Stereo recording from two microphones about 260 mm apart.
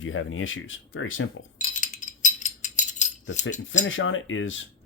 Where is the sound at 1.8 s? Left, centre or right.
Left.